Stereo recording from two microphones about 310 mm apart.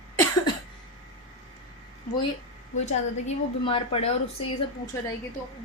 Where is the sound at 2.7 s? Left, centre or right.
Left.